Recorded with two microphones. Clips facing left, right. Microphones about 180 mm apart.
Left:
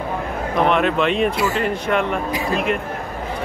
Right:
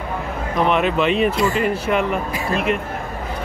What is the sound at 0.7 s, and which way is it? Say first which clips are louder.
Speech: right 1 dB; centre (ahead or behind).